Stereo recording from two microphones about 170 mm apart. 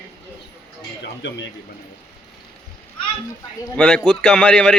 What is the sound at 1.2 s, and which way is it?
Speech, 90° left.